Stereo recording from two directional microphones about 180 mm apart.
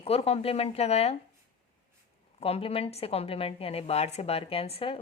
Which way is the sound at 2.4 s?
30° left (ahead or behind).